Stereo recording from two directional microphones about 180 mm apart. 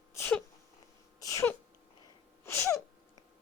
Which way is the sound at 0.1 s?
15° left (ahead or behind).